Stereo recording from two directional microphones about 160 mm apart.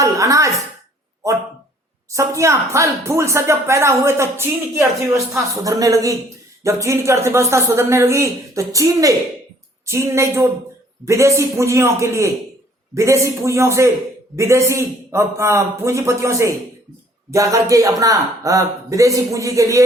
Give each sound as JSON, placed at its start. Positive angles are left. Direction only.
{"t": 0.0, "sound": "speech", "side_deg": -20}
{"t": 2.1, "sound": "speech", "side_deg": -20}